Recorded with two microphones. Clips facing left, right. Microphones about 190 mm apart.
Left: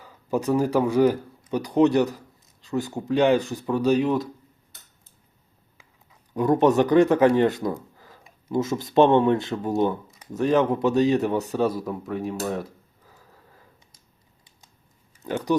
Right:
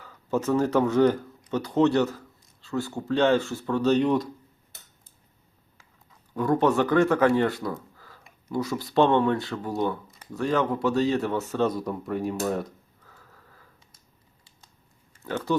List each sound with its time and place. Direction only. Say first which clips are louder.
0.0 s speech: left 1 dB; 15° left (ahead or behind)
6.1 s speech: left 3 dB; 20° left (ahead or behind); by 12.7 s centre (ahead or behind)
13.1 s sniff: left 2 dB; 15° left (ahead or behind)
15.2 s speech: left 3 dB; 15° left (ahead or behind)